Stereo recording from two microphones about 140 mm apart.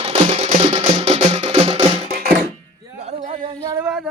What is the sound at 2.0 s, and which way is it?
Music, 90° right.